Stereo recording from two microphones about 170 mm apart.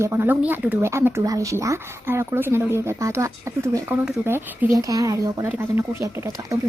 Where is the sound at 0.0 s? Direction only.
15° right (ahead or behind).